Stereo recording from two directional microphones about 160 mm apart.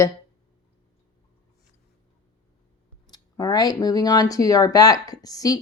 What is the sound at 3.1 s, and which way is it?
Speech, 25° left (ahead or behind).